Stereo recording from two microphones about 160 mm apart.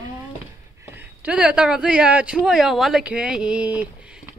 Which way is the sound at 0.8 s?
10° right (ahead or behind).